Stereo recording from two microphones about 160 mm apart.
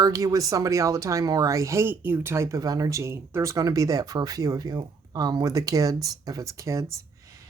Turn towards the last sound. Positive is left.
turn(degrees=-20)  # may be behind; listen again after turning